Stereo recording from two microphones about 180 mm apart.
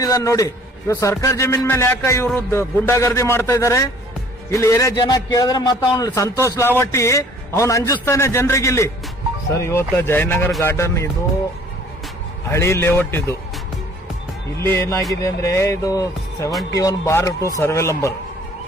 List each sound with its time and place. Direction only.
0.0 s a man's voice: 20° left (ahead or behind)
12.5 s a man's voice: 15° left (ahead or behind)
14.6 s a man's voice: 15° left (ahead or behind)